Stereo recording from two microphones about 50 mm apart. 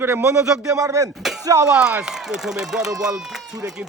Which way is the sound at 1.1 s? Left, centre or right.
Centre.